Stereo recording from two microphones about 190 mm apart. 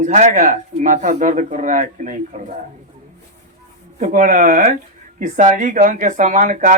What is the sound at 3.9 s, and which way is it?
Speech, 40° right (ahead or behind).